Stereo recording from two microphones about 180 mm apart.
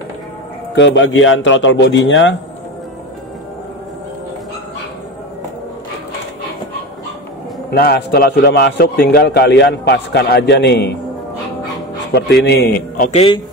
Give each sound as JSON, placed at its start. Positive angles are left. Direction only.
{"t": 0.7, "sound": "speech", "side_deg": 85}
{"t": 7.7, "sound": "a man's voice", "side_deg": 60}
{"t": 12.1, "sound": "a man's voice", "side_deg": 65}
{"t": 13.1, "sound": "a man's voice", "side_deg": 35}